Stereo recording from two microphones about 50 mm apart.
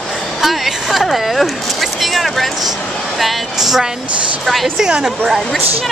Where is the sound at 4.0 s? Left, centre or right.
Right.